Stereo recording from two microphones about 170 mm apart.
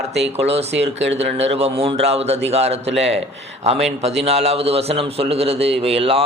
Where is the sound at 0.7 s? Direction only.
90° right.